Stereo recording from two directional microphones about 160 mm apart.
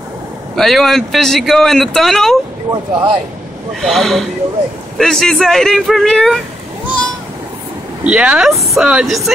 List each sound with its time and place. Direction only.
0.6 s speech: centre (ahead or behind)
2.7 s speech: 30° right (ahead or behind)
3.8 s speech: centre (ahead or behind)
8.0 s speech: 5° right (ahead or behind)